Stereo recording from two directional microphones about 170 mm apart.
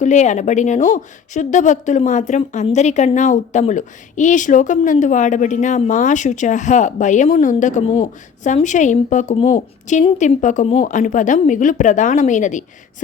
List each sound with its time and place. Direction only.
0.0 s a woman's voice: 45° left (ahead or behind)